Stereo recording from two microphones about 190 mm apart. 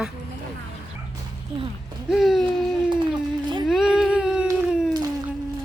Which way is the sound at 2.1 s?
Centre (ahead or behind).